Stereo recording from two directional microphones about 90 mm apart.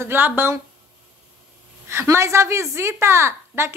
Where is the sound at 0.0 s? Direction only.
25° right (ahead or behind).